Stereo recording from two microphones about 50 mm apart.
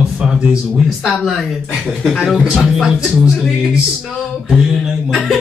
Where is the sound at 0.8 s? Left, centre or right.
Centre.